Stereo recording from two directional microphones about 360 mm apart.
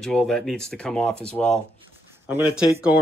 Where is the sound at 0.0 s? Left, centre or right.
Centre.